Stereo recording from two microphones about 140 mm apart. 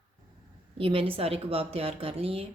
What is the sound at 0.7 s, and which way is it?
A woman's voice, 40° right (ahead or behind).